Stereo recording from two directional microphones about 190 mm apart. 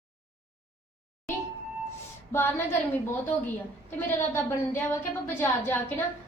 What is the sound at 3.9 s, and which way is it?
A woman's voice, 10° left (ahead or behind).